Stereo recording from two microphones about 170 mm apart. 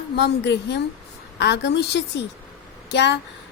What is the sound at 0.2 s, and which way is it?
A woman's voice, 90° left.